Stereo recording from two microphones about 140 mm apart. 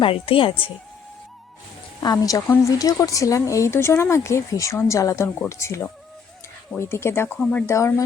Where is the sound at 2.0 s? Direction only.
25° left (ahead or behind); by 7.7 s 10° left (ahead or behind).